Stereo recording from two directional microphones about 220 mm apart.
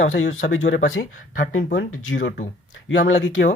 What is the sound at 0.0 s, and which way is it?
Speech, 60° left (ahead or behind).